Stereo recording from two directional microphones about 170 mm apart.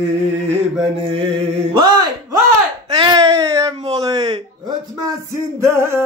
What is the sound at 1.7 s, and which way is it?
Speech, 25° right (ahead or behind).